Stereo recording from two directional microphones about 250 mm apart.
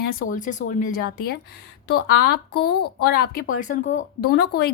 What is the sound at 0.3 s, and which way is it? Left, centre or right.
Speech, left.